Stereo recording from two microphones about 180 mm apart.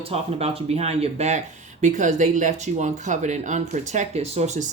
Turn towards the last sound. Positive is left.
turn(degrees=-40)  # may be behind; listen again after turning